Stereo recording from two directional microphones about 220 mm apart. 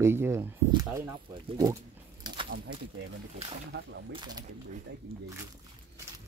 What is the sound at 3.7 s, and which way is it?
Speech, 55° right (ahead or behind).